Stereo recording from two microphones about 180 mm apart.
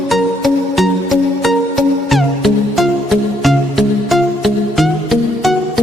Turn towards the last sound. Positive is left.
turn(degrees=0)  # may be behind; listen again after turning